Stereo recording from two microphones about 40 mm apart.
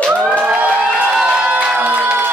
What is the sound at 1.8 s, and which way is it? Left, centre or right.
Music, right.